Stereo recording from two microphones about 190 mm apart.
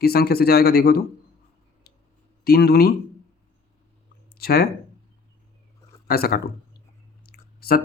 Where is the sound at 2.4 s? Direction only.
55° left (ahead or behind).